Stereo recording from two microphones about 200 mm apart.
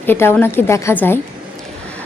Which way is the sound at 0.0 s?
10° left (ahead or behind).